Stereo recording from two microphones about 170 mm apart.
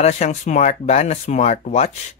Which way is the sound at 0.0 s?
45° left (ahead or behind).